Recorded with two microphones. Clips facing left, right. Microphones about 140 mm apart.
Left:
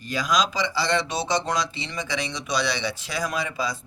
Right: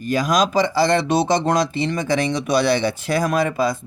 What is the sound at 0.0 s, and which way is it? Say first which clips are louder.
Speech: right 6 dB; 50° right (ahead or behind).